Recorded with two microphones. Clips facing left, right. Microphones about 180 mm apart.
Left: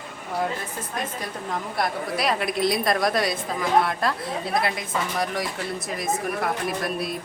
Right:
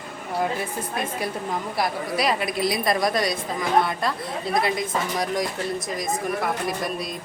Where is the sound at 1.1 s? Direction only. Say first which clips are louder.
Right 3 dB; 5° right (ahead or behind).